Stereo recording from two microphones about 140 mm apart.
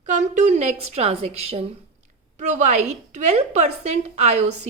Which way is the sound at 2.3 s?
60° right (ahead or behind).